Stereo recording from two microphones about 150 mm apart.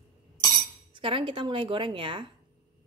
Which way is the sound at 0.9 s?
35° right (ahead or behind).